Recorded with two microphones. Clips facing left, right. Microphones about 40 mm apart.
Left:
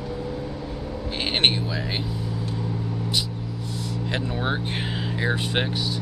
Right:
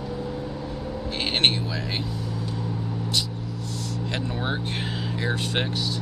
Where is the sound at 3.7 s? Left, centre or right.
Centre.